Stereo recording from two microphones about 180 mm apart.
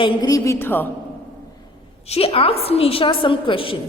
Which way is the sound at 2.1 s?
30° left (ahead or behind).